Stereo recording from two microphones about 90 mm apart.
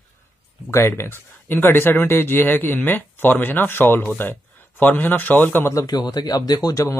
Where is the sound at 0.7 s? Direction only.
25° left (ahead or behind).